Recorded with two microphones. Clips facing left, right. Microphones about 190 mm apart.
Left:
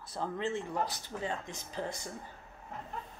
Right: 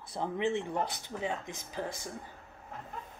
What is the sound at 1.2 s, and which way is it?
Speech, 15° right (ahead or behind).